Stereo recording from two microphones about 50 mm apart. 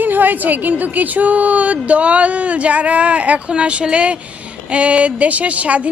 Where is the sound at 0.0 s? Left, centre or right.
Right.